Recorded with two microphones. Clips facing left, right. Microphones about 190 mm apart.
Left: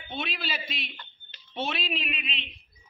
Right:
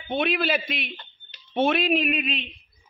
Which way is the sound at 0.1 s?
55° right (ahead or behind).